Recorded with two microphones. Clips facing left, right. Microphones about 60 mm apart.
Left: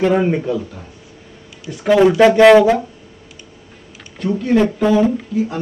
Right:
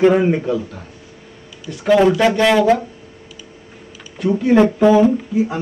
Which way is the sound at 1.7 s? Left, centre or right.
Centre.